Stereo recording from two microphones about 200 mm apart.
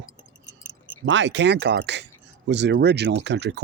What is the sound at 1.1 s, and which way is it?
Speech, 65° right (ahead or behind).